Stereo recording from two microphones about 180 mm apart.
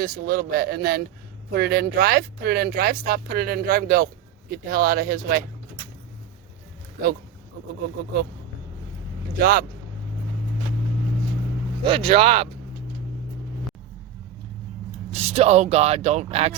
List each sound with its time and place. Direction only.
0.0 s speech: 55° right (ahead or behind)
9.4 s speech: 55° right (ahead or behind)
11.8 s speech: 30° right (ahead or behind)
15.1 s speech: 35° right (ahead or behind)